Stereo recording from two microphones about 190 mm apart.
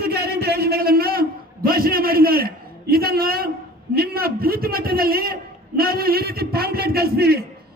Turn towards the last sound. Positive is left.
turn(degrees=-55)  # may be behind; listen again after turning